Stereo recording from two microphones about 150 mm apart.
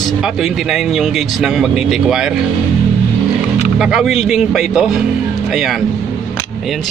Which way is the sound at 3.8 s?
5° right (ahead or behind).